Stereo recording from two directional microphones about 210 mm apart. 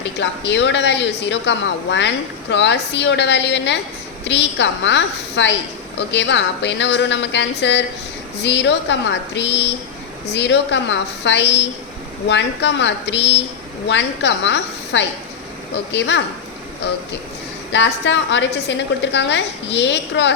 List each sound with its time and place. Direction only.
0.0 s speech: 55° left (ahead or behind)
17.7 s speech: 55° left (ahead or behind)